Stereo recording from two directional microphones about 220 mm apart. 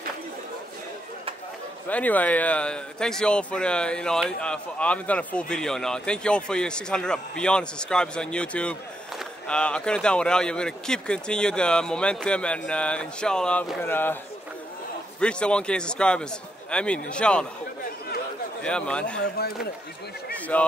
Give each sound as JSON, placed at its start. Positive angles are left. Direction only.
{"t": 1.9, "sound": "speech", "side_deg": 5}
{"t": 15.1, "sound": "speech", "side_deg": 5}
{"t": 18.6, "sound": "speech", "side_deg": 5}
{"t": 19.2, "sound": "speech", "side_deg": 45}
{"t": 20.3, "sound": "a sound", "side_deg": 5}